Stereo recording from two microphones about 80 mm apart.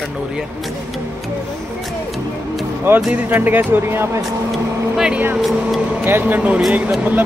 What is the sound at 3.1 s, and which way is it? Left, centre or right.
Speech, right.